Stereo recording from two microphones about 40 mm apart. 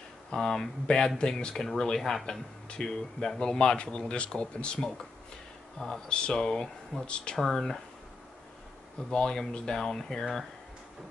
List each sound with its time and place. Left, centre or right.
0.3 s speech: centre
2.0 s speech: centre
2.7 s speech: centre
4.7 s speech: centre
7.3 s speech: centre
9.1 s speech: centre